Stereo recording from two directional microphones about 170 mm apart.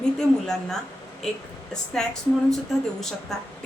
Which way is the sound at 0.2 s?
5° left (ahead or behind).